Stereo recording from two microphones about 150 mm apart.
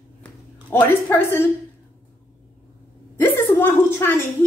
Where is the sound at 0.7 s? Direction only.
15° left (ahead or behind).